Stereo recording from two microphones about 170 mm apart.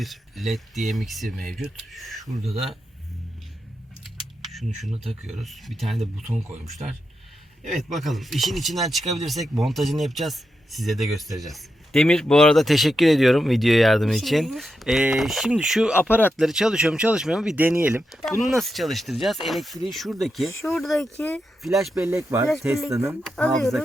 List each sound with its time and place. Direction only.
0.0 s speech: centre (ahead or behind)
4.4 s camera: centre (ahead or behind)
5.2 s speech: centre (ahead or behind)
7.9 s speech: centre (ahead or behind)
21.9 s speech: 15° right (ahead or behind)
23.2 s speech: centre (ahead or behind)